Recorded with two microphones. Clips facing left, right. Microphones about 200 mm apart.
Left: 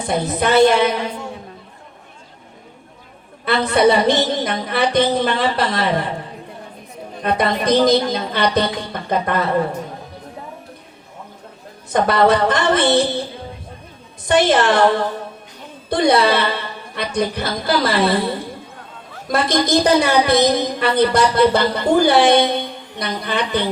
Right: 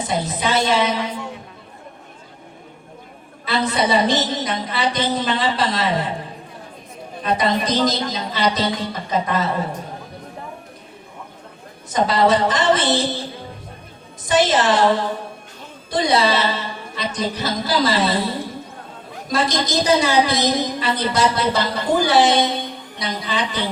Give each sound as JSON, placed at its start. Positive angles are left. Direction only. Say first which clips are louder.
{"t": 0.1, "sound": "a woman's voice", "louder": "left 6 dB", "side_deg": 60}
{"t": 3.4, "sound": "a woman's voice", "louder": "left 6 dB", "side_deg": 60}
{"t": 7.2, "sound": "a woman's voice", "louder": "left 1 dB", "side_deg": 60}
{"t": 11.9, "sound": "a woman's voice", "louder": "left 2 dB", "side_deg": 60}
{"t": 14.3, "sound": "a woman's voice", "louder": "left 2 dB", "side_deg": 60}